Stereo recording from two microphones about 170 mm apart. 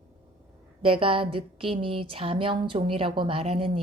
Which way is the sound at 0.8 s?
30° right (ahead or behind).